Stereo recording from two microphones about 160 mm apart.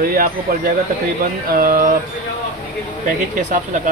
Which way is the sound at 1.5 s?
65° right (ahead or behind).